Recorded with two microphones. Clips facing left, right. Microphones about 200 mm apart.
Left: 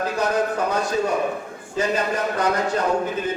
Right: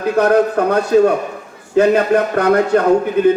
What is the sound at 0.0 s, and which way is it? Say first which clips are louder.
A man's voice: right 9 dB; 60° right (ahead or behind).